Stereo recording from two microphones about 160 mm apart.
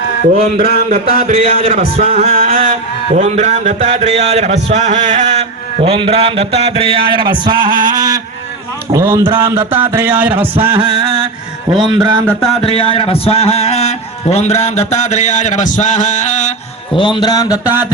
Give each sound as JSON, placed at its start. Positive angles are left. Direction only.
{"t": 0.5, "sound": "mantra", "side_deg": -65}
{"t": 1.3, "sound": "a man's voice", "side_deg": -40}
{"t": 2.3, "sound": "a sound", "side_deg": -60}
{"t": 3.2, "sound": "music", "side_deg": -45}
{"t": 4.3, "sound": "a man's voice", "side_deg": -45}
{"t": 7.8, "sound": "a sound", "side_deg": -25}
{"t": 8.9, "sound": "a man's voice", "side_deg": -20}
{"t": 9.2, "sound": "a man's voice", "side_deg": -30}
{"t": 9.9, "sound": "speech", "side_deg": -15}
{"t": 10.5, "sound": "music", "side_deg": -35}
{"t": 11.7, "sound": "a man's voice", "side_deg": -30}
{"t": 12.6, "sound": "music", "side_deg": 35}
{"t": 17.0, "sound": "a sound", "side_deg": 30}